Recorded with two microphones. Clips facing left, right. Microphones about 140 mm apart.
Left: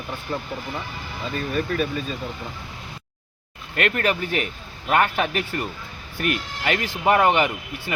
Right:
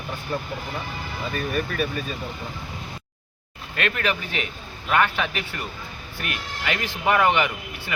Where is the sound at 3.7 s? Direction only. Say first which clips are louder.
Left 3 dB; 45° left (ahead or behind).